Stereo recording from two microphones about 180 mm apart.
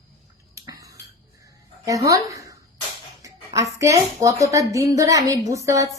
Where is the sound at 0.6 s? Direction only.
20° right (ahead or behind).